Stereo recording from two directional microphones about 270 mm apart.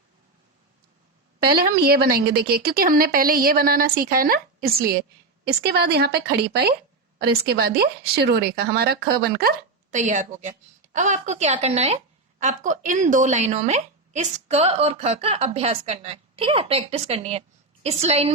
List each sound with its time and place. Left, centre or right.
1.4 s a woman's voice: right